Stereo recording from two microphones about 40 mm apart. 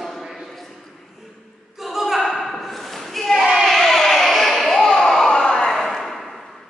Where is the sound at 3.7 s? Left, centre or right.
Centre.